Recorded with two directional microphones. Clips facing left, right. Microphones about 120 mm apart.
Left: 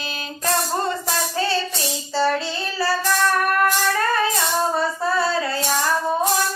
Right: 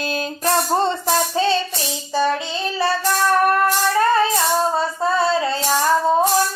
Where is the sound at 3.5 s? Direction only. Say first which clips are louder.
Right 2 dB; 25° right (ahead or behind).